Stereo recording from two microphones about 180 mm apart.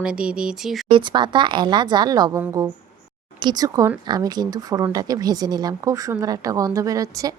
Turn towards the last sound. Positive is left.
turn(degrees=-20)  # may be behind; listen again after turning